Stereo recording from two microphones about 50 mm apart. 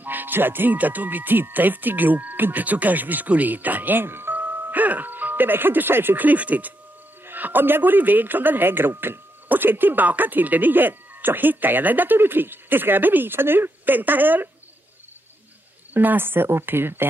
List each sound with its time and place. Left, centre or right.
0.0 s speech: right
4.4 s speech: right
15.9 s speech: right